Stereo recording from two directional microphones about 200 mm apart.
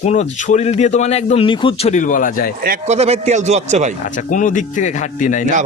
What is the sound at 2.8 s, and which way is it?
A man's voice, 30° right (ahead or behind).